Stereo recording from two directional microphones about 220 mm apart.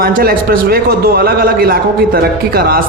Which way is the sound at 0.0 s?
40° right (ahead or behind).